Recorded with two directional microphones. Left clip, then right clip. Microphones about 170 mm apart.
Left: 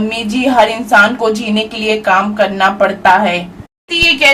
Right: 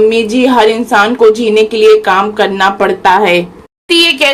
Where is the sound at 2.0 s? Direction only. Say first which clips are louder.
Right 2 dB; 25° right (ahead or behind).